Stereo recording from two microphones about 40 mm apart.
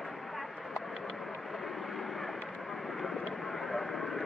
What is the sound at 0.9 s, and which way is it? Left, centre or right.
Vehicle, centre.